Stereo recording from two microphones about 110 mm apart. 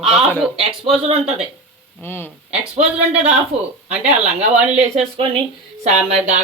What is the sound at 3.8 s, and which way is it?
Speech, 90° right.